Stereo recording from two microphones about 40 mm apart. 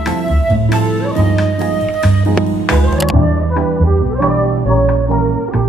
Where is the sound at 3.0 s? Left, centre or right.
Centre.